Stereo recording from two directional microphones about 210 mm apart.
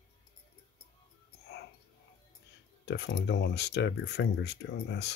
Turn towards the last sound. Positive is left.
turn(degrees=55)  # may be behind; listen again after turning